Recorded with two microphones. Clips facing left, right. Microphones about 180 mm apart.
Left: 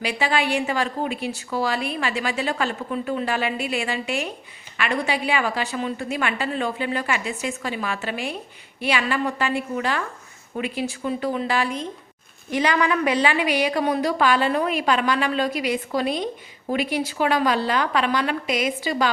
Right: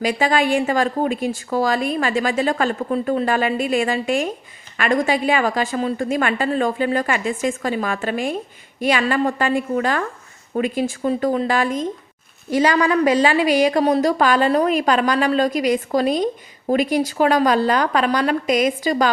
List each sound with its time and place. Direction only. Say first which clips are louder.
0.0 s a woman's voice: right 5 dB; 45° right (ahead or behind)